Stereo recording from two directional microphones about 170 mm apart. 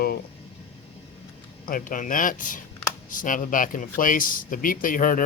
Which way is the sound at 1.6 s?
55° left (ahead or behind).